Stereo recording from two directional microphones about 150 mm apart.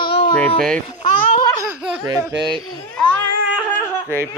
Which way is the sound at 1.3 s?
30° left (ahead or behind).